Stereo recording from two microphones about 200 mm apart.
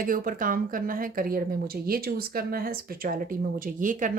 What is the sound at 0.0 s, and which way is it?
Speech, 45° right (ahead or behind).